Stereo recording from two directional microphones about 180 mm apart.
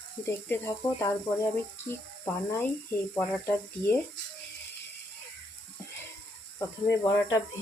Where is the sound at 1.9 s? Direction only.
15° left (ahead or behind).